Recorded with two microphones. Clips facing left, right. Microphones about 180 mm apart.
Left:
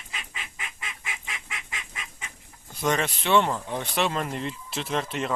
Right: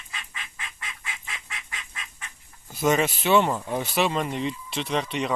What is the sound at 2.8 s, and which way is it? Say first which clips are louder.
Speech: right 4 dB; 5° right (ahead or behind).